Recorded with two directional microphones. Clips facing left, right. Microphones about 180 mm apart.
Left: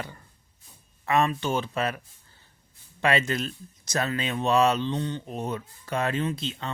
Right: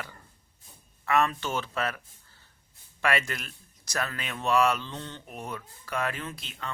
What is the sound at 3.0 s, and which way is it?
Speech, 20° left (ahead or behind).